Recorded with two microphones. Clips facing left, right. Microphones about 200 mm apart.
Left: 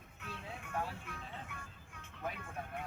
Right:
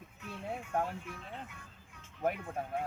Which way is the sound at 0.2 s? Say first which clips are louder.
Right 3 dB; 60° left (ahead or behind).